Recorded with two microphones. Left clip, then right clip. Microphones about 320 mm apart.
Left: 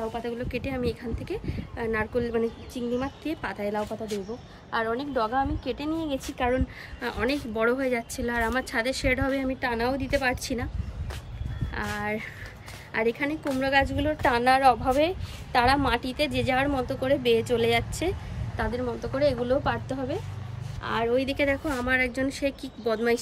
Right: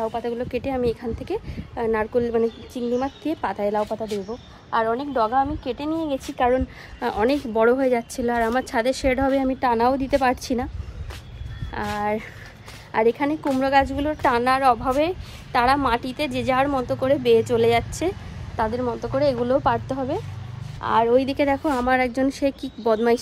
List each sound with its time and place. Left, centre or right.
0.1 s a woman's voice: centre
11.7 s a woman's voice: centre